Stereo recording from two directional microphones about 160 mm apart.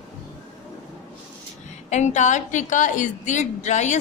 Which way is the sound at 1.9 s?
45° left (ahead or behind).